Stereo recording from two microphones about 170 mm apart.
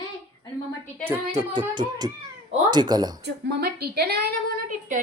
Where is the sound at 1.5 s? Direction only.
25° right (ahead or behind).